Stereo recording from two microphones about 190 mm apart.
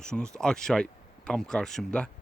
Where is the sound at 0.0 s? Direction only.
5° left (ahead or behind).